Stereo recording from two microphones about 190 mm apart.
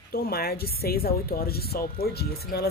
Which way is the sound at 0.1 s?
55° left (ahead or behind).